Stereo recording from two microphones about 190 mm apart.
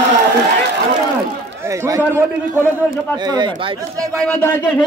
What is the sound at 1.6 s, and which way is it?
A man's voice, 15° right (ahead or behind).